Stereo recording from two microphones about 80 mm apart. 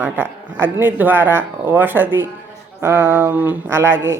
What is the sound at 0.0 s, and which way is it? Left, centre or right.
A woman's voice, right.